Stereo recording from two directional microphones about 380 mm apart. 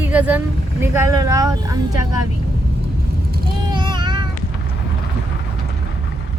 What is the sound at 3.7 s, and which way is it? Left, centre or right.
Child singing, centre.